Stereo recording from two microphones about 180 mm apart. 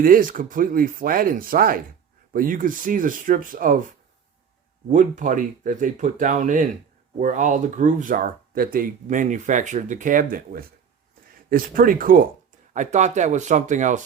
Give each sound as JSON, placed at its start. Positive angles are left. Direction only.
{"t": 0.0, "sound": "speech", "side_deg": -50}